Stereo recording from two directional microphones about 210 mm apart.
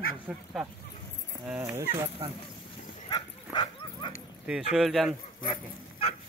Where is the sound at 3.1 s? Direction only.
20° left (ahead or behind).